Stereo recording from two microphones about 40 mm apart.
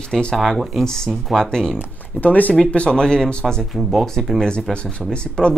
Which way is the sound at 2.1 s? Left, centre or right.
Left.